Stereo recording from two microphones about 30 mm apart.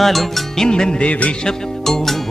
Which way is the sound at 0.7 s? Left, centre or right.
Left.